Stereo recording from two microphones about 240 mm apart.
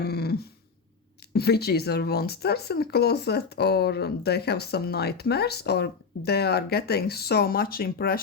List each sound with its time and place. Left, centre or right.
0.0 s throat clearing: left
1.3 s speech: left